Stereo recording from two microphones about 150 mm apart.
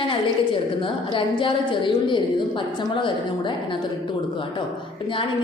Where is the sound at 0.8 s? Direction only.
35° left (ahead or behind).